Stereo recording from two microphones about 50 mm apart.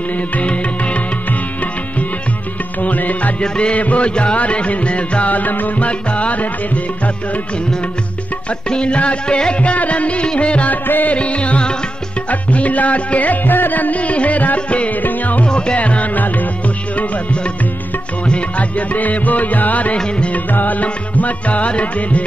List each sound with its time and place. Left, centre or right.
0.4 s music: left
2.8 s music: left
8.6 s music: centre
10.9 s music: left
11.1 s music: left
15.4 s music: centre